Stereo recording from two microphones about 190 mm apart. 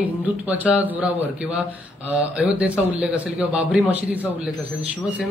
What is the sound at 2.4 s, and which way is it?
A man's voice, 5° right (ahead or behind).